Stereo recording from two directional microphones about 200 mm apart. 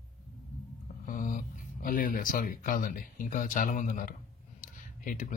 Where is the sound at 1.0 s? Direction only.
40° left (ahead or behind).